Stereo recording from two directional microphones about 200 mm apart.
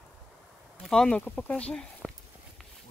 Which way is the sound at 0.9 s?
5° left (ahead or behind).